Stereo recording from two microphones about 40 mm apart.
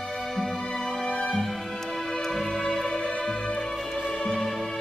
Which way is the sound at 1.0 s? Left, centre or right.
Centre.